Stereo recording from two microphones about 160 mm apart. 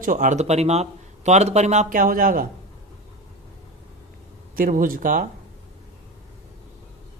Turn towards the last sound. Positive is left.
turn(degrees=-60)  # may be behind; listen again after turning